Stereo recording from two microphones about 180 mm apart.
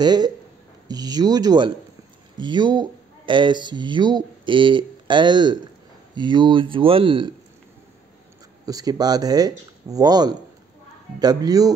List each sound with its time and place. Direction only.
0.0 s speech: 25° right (ahead or behind)
8.6 s speech: 20° right (ahead or behind)